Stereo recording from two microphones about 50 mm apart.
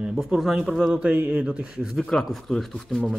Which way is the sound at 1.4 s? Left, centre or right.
Right.